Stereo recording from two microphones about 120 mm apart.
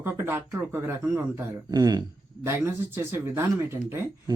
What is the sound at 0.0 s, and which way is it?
Speech, 20° right (ahead or behind).